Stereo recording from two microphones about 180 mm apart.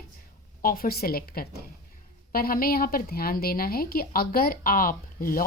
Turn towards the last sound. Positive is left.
turn(degrees=50)  # may be behind; listen again after turning